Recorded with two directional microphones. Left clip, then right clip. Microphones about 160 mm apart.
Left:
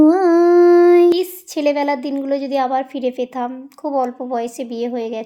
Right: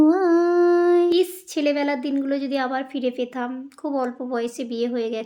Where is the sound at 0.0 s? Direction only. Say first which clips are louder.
Left 5 dB; 25° left (ahead or behind).